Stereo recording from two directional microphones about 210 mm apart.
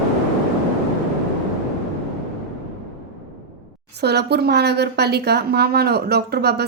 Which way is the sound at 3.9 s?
50° right (ahead or behind).